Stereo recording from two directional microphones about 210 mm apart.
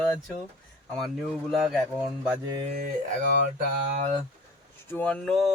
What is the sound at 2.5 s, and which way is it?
Speech, 25° right (ahead or behind).